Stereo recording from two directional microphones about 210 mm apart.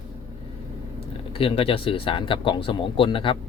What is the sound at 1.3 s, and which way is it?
Speech, 25° left (ahead or behind).